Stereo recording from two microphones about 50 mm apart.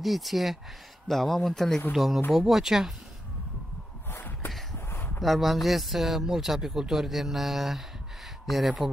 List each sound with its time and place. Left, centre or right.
0.0 s speech: centre
4.1 s a sound: left
5.2 s speech: centre